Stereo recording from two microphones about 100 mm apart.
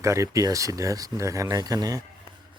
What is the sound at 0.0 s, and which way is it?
Speech, 30° right (ahead or behind).